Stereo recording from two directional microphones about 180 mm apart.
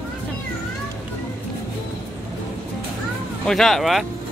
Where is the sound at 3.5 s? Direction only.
Centre (ahead or behind).